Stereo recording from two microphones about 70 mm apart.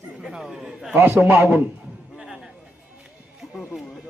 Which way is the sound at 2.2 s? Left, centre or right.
Centre.